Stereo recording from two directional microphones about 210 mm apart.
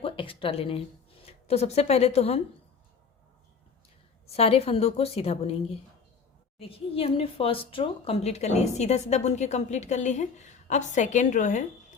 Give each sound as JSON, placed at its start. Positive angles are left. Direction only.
{"t": 0.0, "sound": "speech", "side_deg": 25}
{"t": 4.3, "sound": "a woman's voice", "side_deg": 30}